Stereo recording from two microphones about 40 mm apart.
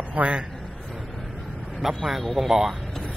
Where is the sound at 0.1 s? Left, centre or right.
Right.